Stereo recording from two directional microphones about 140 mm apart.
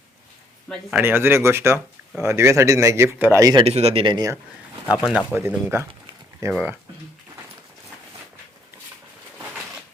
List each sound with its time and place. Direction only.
0.9 s speech: 10° right (ahead or behind)
3.4 s speech: 30° right (ahead or behind)
3.7 s speech: 45° right (ahead or behind)
4.9 s speech: centre (ahead or behind)
5.3 s speech: 15° right (ahead or behind)